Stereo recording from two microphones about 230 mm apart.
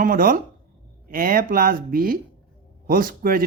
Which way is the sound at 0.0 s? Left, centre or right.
Right.